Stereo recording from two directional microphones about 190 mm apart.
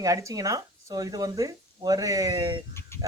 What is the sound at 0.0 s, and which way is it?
A man's voice, 15° right (ahead or behind).